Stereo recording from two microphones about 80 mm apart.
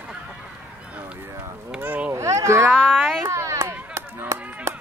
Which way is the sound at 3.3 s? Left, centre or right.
Right.